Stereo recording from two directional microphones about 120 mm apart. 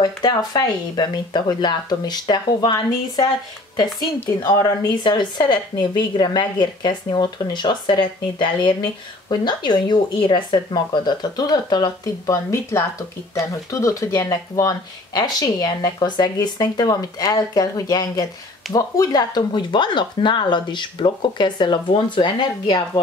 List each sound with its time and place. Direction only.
0.0 s speech: 35° left (ahead or behind)
4.5 s speech: 40° left (ahead or behind)